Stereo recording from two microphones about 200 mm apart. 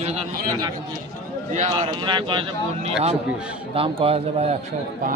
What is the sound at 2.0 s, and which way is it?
Speech, 25° right (ahead or behind).